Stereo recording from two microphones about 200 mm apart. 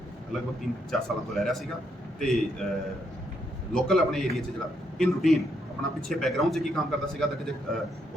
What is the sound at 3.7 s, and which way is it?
A man's voice, centre (ahead or behind).